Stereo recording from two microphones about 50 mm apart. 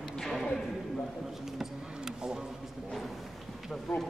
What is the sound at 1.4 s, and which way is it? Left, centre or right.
Speech, centre.